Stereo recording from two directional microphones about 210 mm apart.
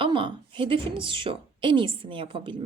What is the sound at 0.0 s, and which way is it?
A woman's voice, 25° right (ahead or behind).